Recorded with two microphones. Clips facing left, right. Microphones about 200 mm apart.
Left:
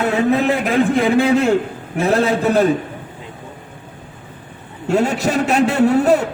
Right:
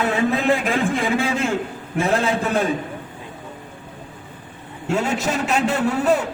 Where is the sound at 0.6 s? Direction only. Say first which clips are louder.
Left 6 dB; 60° left (ahead or behind).